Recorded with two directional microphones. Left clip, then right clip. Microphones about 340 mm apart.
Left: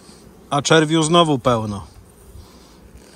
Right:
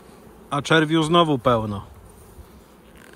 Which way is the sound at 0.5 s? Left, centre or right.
Centre.